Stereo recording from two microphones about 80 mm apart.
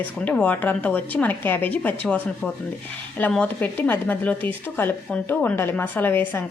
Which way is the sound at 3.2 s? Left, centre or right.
Left.